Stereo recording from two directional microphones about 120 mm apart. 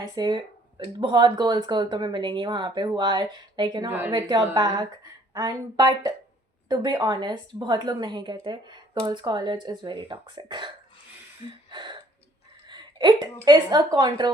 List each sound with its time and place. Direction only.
0.0 s speech: 35° right (ahead or behind)
3.8 s a woman's voice: 15° right (ahead or behind)
4.3 s speech: 40° right (ahead or behind)
11.7 s a sound: 40° right (ahead or behind)
12.6 s a woman's voice: 40° right (ahead or behind)